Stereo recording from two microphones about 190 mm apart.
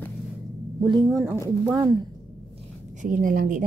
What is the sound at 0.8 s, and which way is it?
Speech, 25° right (ahead or behind).